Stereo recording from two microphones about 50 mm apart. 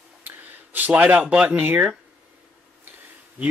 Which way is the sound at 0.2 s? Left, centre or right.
Right.